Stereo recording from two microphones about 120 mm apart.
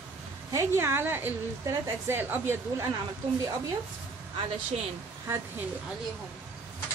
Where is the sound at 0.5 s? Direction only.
25° right (ahead or behind).